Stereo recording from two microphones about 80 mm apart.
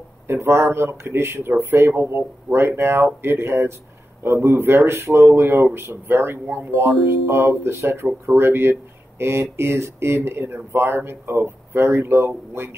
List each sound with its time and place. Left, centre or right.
0.3 s speech: right